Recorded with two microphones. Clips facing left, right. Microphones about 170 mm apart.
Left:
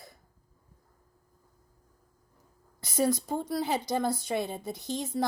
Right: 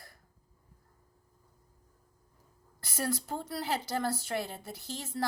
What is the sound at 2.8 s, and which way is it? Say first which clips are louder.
Speech: left 7 dB; 20° left (ahead or behind).